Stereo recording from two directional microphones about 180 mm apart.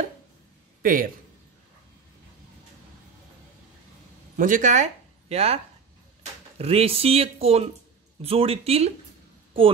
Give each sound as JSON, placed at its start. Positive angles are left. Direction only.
{"t": 0.8, "sound": "speech", "side_deg": -50}
{"t": 4.4, "sound": "speech", "side_deg": -45}
{"t": 5.3, "sound": "speech", "side_deg": -35}
{"t": 6.6, "sound": "speech", "side_deg": -35}